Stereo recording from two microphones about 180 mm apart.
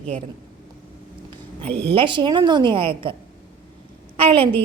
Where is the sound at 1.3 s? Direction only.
30° right (ahead or behind).